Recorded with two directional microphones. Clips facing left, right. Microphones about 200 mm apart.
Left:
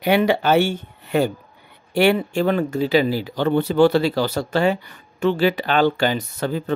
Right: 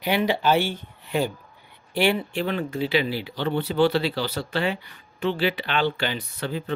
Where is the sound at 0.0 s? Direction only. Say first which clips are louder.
Left 5 dB; 55° left (ahead or behind).